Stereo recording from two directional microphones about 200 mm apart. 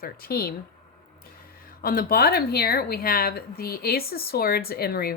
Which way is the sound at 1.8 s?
50° left (ahead or behind).